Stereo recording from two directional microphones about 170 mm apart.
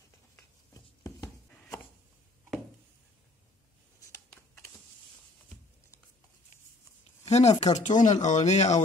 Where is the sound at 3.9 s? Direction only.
15° left (ahead or behind).